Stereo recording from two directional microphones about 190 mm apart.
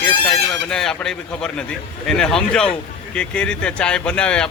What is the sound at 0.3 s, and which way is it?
Speech, 5° left (ahead or behind).